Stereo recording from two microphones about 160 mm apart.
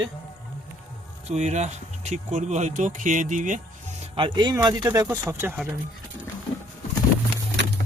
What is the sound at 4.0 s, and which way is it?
Speech, 30° right (ahead or behind).